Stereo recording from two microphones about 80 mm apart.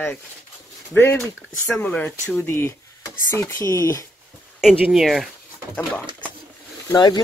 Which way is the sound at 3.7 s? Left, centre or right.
Left.